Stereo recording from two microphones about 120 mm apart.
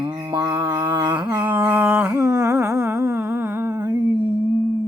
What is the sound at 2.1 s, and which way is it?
Humming, 25° right (ahead or behind).